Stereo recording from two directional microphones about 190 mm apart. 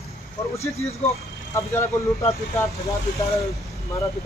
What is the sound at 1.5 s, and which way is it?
Speech, 15° left (ahead or behind).